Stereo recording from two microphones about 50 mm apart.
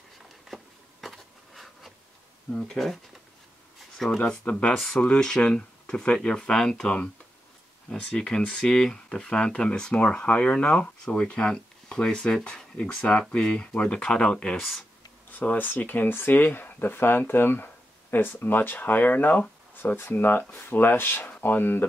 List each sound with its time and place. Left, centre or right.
1.0 s bee: centre
2.5 s speech: centre
4.2 s speech: left
8.0 s speech: centre
14.6 s speech: centre
15.5 s speech: left